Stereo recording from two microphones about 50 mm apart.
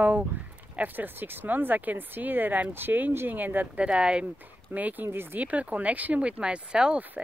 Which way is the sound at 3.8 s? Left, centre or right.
Right.